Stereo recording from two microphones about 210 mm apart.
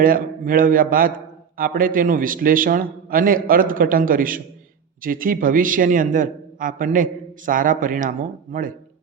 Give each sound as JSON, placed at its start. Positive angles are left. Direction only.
{"t": 0.0, "sound": "a man's voice", "side_deg": -40}